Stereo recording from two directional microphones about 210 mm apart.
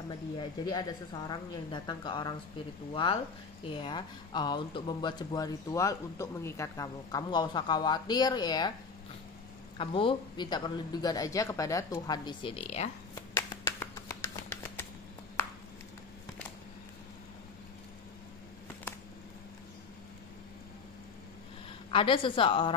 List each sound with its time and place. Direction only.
0.4 s speech: 20° left (ahead or behind)
9.8 s speech: 25° left (ahead or behind)
13.1 s shuffling cards: 15° left (ahead or behind)
21.9 s speech: 25° left (ahead or behind)